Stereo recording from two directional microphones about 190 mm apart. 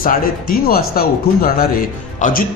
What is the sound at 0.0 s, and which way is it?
A man's voice, 50° left (ahead or behind).